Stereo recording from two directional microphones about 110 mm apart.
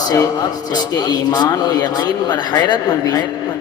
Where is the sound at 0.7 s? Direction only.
40° left (ahead or behind).